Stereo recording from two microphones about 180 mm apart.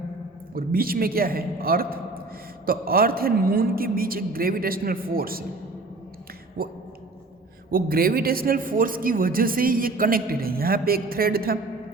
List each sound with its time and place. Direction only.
0.5 s a man's voice: 55° right (ahead or behind)
6.6 s a man's voice: 55° right (ahead or behind)